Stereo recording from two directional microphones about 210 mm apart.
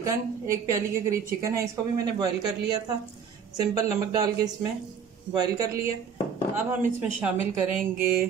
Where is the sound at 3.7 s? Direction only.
20° right (ahead or behind).